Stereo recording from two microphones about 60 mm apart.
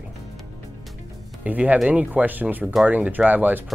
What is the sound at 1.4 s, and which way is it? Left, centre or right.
Speech, right.